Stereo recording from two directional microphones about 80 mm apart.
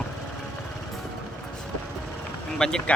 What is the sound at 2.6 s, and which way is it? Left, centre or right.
Speech, centre.